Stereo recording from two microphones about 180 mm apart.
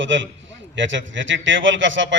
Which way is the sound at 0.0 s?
90° right.